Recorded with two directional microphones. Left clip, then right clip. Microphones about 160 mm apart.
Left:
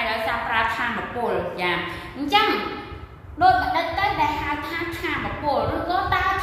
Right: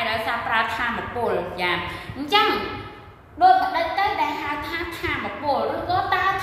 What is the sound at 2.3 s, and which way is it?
Speech, 25° right (ahead or behind).